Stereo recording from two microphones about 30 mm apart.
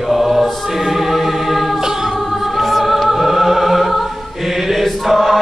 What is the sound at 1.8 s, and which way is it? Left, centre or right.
Music, centre.